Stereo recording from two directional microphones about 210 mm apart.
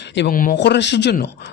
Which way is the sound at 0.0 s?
55° left (ahead or behind).